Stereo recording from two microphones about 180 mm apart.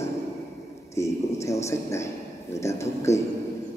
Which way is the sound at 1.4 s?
15° left (ahead or behind).